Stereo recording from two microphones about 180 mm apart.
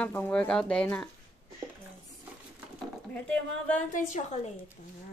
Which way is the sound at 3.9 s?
45° left (ahead or behind).